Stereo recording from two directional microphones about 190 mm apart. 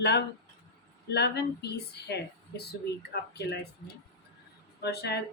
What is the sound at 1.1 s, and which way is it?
A woman's voice, 60° left (ahead or behind).